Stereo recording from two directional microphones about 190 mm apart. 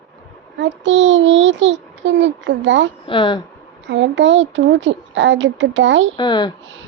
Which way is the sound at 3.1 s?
25° left (ahead or behind).